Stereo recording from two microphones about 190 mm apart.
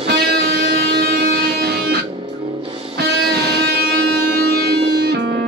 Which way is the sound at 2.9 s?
60° right (ahead or behind).